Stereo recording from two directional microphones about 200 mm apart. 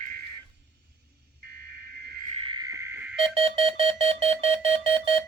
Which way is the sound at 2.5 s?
20° right (ahead or behind).